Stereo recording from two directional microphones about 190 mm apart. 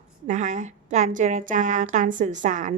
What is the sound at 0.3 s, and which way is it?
Speech, 40° right (ahead or behind).